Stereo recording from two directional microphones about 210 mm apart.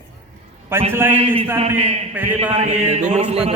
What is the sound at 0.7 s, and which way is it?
Speech, 10° right (ahead or behind).